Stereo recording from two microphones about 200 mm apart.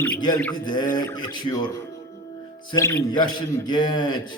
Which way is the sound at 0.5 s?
20° left (ahead or behind).